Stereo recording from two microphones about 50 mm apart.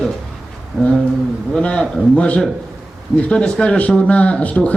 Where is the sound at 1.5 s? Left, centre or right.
Centre.